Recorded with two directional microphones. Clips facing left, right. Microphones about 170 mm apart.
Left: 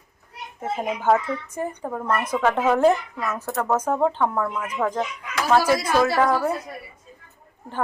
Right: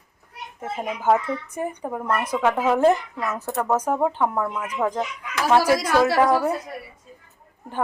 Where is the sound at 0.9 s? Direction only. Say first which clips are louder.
Right 1 dB; 10° right (ahead or behind).